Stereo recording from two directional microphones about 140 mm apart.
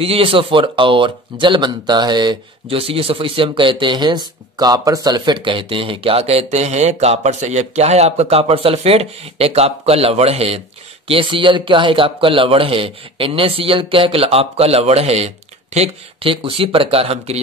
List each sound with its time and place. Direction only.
0.0 s speech: 45° right (ahead or behind)